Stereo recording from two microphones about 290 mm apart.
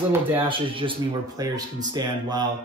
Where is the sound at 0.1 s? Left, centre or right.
Centre.